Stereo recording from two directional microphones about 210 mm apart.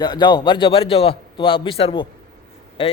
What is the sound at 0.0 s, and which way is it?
A man's voice, 20° left (ahead or behind).